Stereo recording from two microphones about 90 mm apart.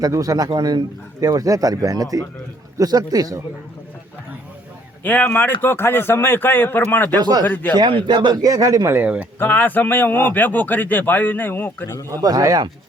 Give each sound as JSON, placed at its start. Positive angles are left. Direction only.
{"t": 0.0, "sound": "speech", "side_deg": -40}
{"t": 1.2, "sound": "speech", "side_deg": -40}
{"t": 5.0, "sound": "a man's voice", "side_deg": 20}
{"t": 7.2, "sound": "speech", "side_deg": -50}
{"t": 7.4, "sound": "a man's voice", "side_deg": 20}
{"t": 7.9, "sound": "speech", "side_deg": -70}
{"t": 9.0, "sound": "speech", "side_deg": -15}
{"t": 9.4, "sound": "a man's voice", "side_deg": 20}
{"t": 12.0, "sound": "speech", "side_deg": -45}